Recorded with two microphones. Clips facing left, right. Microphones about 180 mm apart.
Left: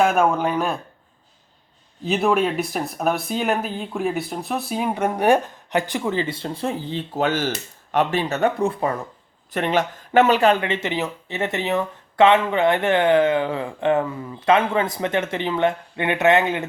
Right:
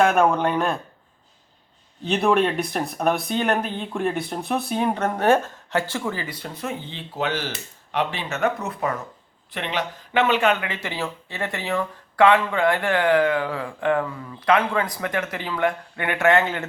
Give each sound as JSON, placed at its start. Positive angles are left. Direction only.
{"t": 0.0, "sound": "speech", "side_deg": 5}
{"t": 2.0, "sound": "speech", "side_deg": 0}
{"t": 8.4, "sound": "speech", "side_deg": 30}
{"t": 9.5, "sound": "speech", "side_deg": 45}